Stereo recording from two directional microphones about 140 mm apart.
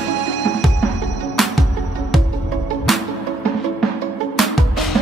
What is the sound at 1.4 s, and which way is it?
Music, centre (ahead or behind).